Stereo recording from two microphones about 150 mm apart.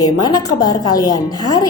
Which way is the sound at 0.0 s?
25° left (ahead or behind).